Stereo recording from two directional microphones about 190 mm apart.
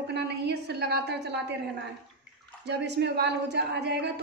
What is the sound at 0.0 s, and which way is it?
A woman's voice, 60° right (ahead or behind).